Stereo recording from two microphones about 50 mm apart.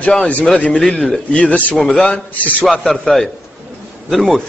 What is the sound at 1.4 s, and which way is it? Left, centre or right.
Speech, left.